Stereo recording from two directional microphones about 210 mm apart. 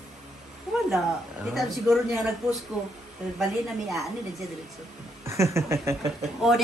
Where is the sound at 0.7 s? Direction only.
Centre (ahead or behind).